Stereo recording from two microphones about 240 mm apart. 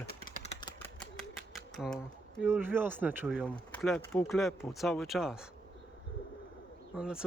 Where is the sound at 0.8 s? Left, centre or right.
Centre.